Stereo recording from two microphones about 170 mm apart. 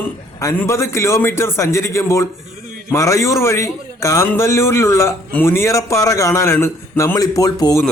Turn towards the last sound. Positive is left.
turn(degrees=20)  # may be behind; listen again after turning